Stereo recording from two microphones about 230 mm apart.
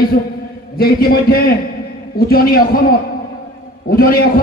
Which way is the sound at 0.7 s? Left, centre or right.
Left.